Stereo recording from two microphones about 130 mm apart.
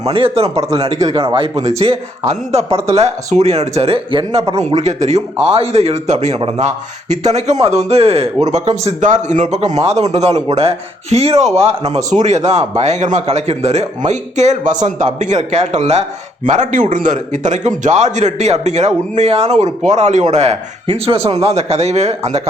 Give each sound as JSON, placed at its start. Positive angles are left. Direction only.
{"t": 0.0, "sound": "a man's voice", "side_deg": -50}
{"t": 0.9, "sound": "a man's voice", "side_deg": -35}
{"t": 1.8, "sound": "a man's voice", "side_deg": -50}